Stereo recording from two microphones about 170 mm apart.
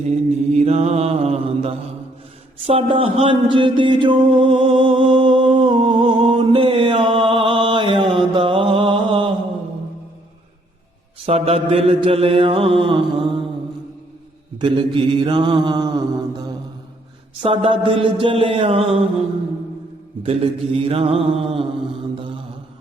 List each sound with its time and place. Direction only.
0.5 s mantra: 40° right (ahead or behind)
4.3 s music: 30° right (ahead or behind)
11.3 s mantra: 35° right (ahead or behind)
14.6 s mantra: 30° right (ahead or behind)
17.4 s mantra: 30° right (ahead or behind)
20.2 s mantra: 35° right (ahead or behind)